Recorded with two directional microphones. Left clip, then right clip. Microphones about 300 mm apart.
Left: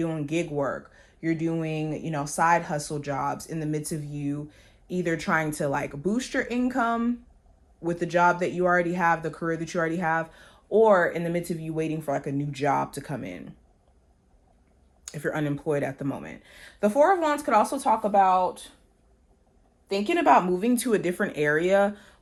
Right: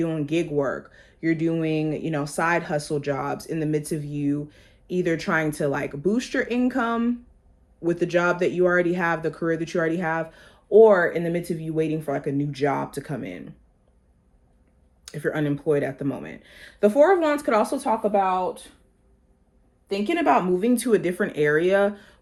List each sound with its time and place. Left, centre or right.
0.0 s speech: left
1.4 s speech: centre; by 6.9 s left
8.2 s speech: left
15.0 s speech: left
16.6 s speech: centre
17.8 s speech: left
19.9 s speech: left